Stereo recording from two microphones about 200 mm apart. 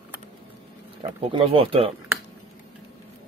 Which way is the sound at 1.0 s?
30° right (ahead or behind).